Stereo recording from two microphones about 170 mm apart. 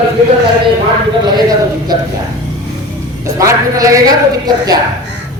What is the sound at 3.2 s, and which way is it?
A woman's voice, 20° right (ahead or behind).